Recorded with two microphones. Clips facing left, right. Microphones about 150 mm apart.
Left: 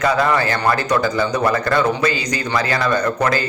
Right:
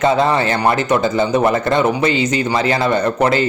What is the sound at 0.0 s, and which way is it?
Speech, 25° right (ahead or behind).